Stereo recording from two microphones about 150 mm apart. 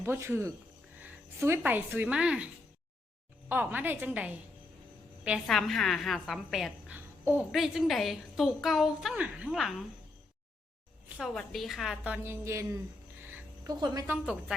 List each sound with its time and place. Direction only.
0.0 s a woman's voice: 15° right (ahead or behind)
3.5 s a woman's voice: 15° right (ahead or behind)
6.9 s babbling: 10° right (ahead or behind)
7.5 s a woman's voice: centre (ahead or behind)
11.2 s a woman's voice: centre (ahead or behind); by 14.0 s 25° right (ahead or behind)